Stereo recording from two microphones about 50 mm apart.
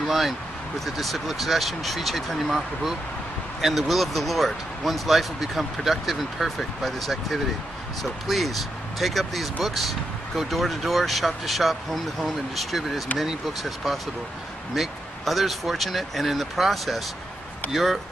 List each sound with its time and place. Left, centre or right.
0.0 s speech: centre